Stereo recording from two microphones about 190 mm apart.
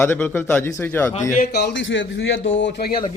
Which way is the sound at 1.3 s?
55° left (ahead or behind).